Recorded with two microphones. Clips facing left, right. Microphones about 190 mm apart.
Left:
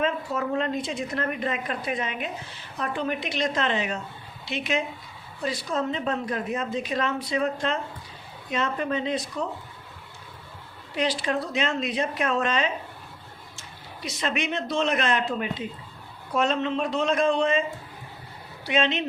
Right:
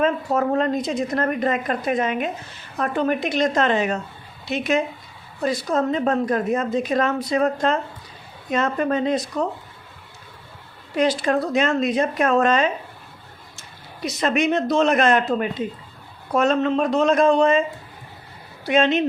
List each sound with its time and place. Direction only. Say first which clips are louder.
0.0 s a woman's voice: right 6 dB; 45° right (ahead or behind)
10.9 s a woman's voice: right 6 dB; 45° right (ahead or behind)
14.0 s a woman's voice: right 8 dB; 45° right (ahead or behind)
18.6 s a woman's voice: right 6 dB; 45° right (ahead or behind)